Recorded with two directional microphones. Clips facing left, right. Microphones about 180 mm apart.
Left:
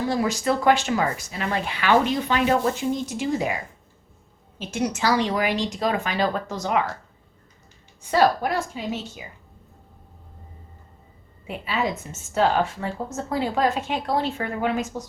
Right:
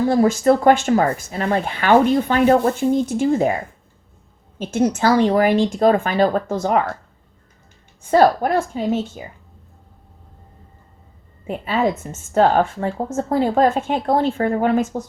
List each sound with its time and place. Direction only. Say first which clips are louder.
0.1 s speech: right 9 dB; 45° right (ahead or behind)
8.1 s speech: right 6 dB; 45° right (ahead or behind)
11.4 s speech: right 6 dB; 50° right (ahead or behind)